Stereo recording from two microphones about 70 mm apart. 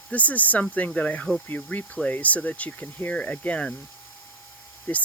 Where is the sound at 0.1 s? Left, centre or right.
Left.